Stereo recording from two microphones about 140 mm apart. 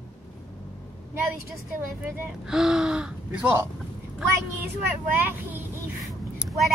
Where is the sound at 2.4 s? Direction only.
5° right (ahead or behind).